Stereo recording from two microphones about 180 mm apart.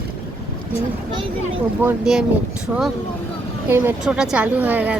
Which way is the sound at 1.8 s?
5° right (ahead or behind).